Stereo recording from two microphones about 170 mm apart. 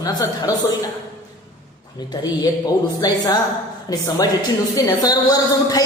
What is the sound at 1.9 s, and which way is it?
A woman's voice, 25° left (ahead or behind).